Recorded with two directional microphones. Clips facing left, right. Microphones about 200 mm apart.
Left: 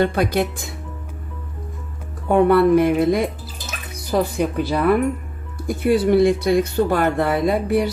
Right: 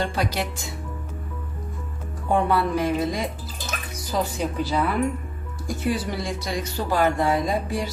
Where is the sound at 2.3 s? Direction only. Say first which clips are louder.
Left 8 dB; 60° left (ahead or behind).